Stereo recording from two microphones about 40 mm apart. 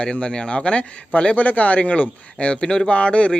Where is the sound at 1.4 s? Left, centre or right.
Left.